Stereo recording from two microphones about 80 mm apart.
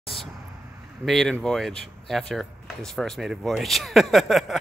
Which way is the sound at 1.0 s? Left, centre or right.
Centre.